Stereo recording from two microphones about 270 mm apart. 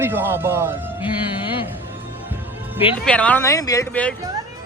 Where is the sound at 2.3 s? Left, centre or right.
Centre.